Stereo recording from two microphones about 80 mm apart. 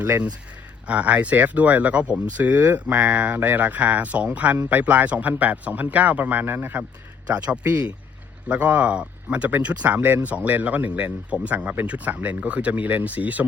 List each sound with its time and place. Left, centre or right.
0.0 s speech: right